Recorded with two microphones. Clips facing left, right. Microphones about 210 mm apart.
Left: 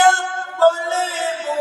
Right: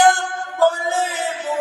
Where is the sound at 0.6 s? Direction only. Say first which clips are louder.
Left 2 dB; 15° right (ahead or behind).